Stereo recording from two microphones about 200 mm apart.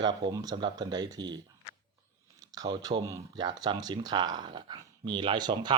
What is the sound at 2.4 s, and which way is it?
Speech, 20° right (ahead or behind).